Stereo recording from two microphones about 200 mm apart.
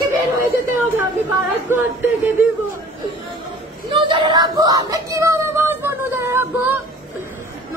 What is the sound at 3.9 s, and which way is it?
Speech, 25° right (ahead or behind).